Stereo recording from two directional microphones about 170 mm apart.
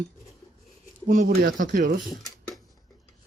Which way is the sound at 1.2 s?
55° right (ahead or behind).